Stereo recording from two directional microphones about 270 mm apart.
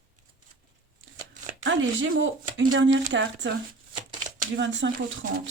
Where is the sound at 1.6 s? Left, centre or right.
Right.